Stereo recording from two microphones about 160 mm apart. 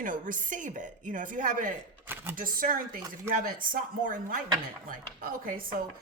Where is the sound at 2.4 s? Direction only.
60° right (ahead or behind).